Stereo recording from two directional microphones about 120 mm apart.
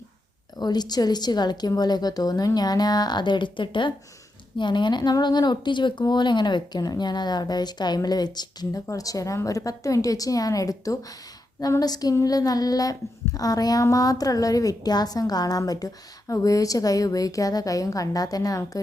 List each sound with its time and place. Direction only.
0.6 s child singing: 35° left (ahead or behind)